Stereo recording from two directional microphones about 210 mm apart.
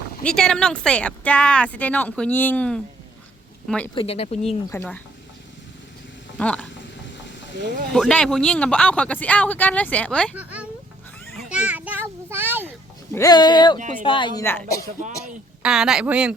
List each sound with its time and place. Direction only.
0.3 s speech: centre (ahead or behind)
3.9 s speech: 30° left (ahead or behind)
4.7 s speech: 5° left (ahead or behind)
6.3 s speech: 5° left (ahead or behind)
7.9 s speech: 5° left (ahead or behind)
10.3 s speech: 5° right (ahead or behind)
11.4 s a sound: 5° right (ahead or behind)
13.1 s speech: 20° left (ahead or behind)
14.4 s speech: 10° left (ahead or behind)
15.6 s speech: centre (ahead or behind)